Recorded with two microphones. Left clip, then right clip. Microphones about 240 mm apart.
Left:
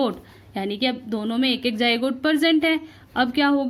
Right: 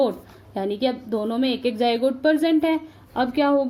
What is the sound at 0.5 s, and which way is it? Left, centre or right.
A woman's voice, left.